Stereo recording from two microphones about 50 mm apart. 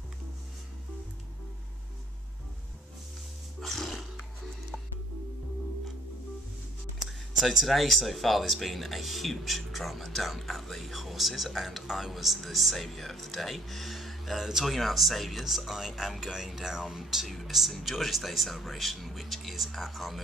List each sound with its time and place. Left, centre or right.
3.6 s music: centre
7.1 s speech: centre